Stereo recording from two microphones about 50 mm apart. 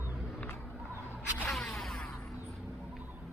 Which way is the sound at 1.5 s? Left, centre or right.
Centre.